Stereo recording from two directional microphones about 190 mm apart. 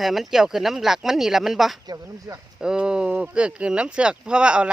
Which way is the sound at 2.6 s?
5° right (ahead or behind).